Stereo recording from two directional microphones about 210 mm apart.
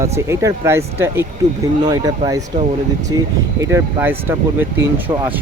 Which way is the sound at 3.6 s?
10° right (ahead or behind).